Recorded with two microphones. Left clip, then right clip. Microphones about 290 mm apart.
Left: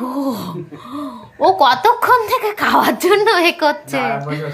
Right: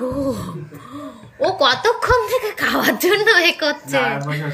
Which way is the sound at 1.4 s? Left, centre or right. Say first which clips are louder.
Left 4 dB; centre.